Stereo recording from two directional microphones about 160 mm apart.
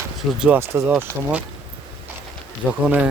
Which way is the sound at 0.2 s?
5° right (ahead or behind).